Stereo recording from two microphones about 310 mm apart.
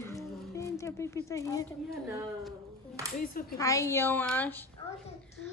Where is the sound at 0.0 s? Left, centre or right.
Centre.